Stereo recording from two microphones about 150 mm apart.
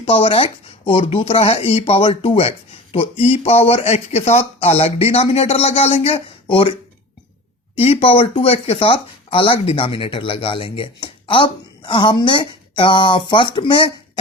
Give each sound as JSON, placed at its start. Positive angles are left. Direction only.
{"t": 0.0, "sound": "speech", "side_deg": 40}
{"t": 7.8, "sound": "speech", "side_deg": 40}